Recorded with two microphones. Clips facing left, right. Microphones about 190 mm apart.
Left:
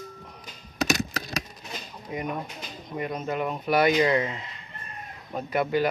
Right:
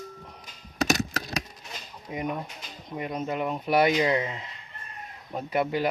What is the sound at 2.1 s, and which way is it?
Speech, 20° right (ahead or behind).